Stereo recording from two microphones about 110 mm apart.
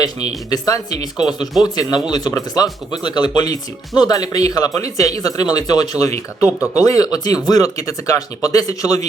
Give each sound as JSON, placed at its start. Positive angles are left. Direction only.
{"t": 0.5, "sound": "speech", "side_deg": 35}